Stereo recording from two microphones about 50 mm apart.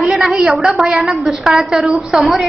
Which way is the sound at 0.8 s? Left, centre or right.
Right.